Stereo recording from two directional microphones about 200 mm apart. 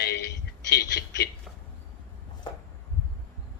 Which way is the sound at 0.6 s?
55° left (ahead or behind).